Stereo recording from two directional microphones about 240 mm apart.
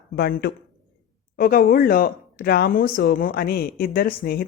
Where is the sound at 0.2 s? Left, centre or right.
Left.